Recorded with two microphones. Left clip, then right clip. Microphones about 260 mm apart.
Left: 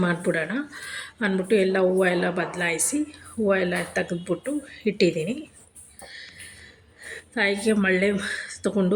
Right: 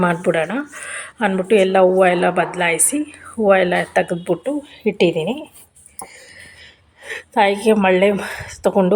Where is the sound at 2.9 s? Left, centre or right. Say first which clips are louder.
Right 5 dB; right.